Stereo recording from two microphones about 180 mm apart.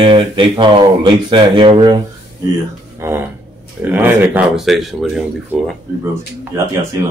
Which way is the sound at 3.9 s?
10° right (ahead or behind).